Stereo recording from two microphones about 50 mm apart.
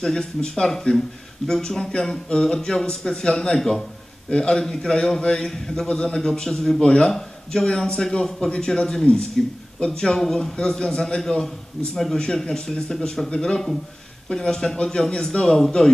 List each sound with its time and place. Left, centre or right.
0.0 s a man's voice: centre
9.8 s a man's voice: centre